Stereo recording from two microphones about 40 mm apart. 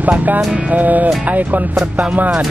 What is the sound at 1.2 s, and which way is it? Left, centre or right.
Speech, right.